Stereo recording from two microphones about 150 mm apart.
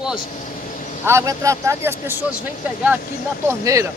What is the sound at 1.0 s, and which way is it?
Speech, 20° right (ahead or behind).